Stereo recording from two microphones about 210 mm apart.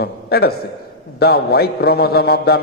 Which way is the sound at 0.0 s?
50° left (ahead or behind).